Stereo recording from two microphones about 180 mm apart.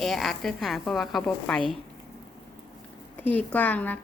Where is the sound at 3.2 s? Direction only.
10° left (ahead or behind).